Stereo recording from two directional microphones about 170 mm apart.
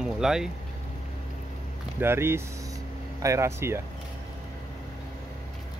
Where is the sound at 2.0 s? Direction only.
15° right (ahead or behind).